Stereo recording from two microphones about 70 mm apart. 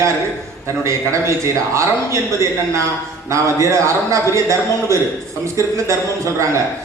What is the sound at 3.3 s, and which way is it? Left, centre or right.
A man's voice, right.